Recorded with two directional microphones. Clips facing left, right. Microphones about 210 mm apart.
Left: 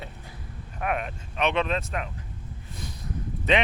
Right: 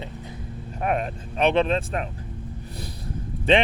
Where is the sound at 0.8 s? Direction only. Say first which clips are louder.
Right 4 dB; 35° right (ahead or behind).